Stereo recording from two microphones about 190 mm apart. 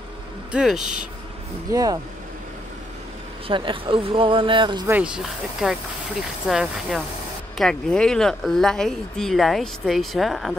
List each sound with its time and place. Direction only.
0.5 s speech: 5° right (ahead or behind)
1.7 s speech: 20° right (ahead or behind)
3.4 s speech: 25° right (ahead or behind)
4.8 s speech: 5° right (ahead or behind)